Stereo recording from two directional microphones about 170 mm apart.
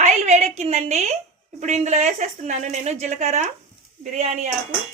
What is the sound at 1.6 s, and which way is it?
A woman's voice, 45° right (ahead or behind).